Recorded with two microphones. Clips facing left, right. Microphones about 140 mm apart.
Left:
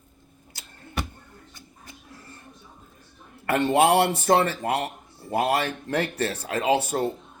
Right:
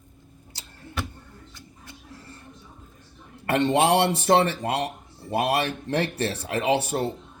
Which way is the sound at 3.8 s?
25° right (ahead or behind).